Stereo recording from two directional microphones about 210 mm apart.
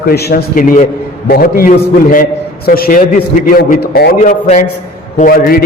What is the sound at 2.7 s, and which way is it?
A man's voice, 45° left (ahead or behind).